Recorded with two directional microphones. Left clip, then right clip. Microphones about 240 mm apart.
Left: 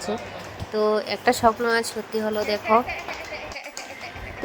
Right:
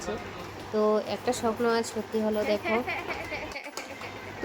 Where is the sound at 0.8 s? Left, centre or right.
Left.